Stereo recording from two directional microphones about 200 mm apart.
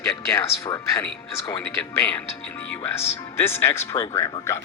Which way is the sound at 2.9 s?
10° left (ahead or behind).